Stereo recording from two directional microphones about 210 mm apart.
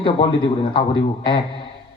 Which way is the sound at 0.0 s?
25° left (ahead or behind).